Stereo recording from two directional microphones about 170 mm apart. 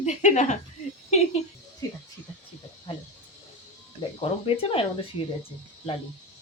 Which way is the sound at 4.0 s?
30° left (ahead or behind).